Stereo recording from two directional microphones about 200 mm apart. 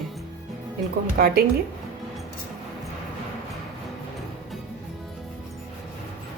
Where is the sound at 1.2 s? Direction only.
50° right (ahead or behind).